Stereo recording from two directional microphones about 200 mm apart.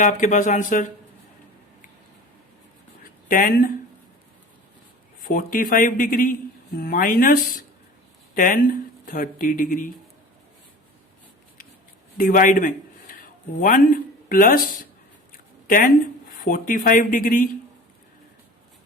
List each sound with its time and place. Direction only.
0.0 s speech: 40° left (ahead or behind)
3.0 s a sound: 45° left (ahead or behind)
5.2 s speech: 45° left (ahead or behind)
12.1 s a man's voice: 45° left (ahead or behind)